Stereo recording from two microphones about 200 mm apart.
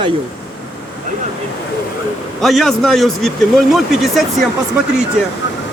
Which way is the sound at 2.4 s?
Centre (ahead or behind).